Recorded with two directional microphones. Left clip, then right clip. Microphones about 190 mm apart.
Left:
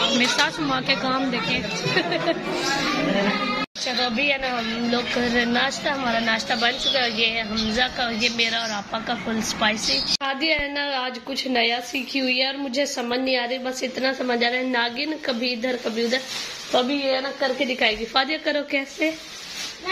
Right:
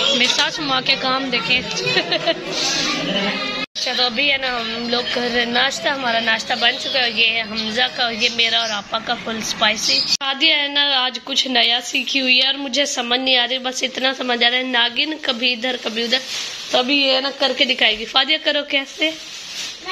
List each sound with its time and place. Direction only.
0.2 s a woman's voice: centre (ahead or behind)
3.8 s a woman's voice: centre (ahead or behind)
16.7 s a woman's voice: 20° right (ahead or behind)
17.7 s a woman's voice: centre (ahead or behind)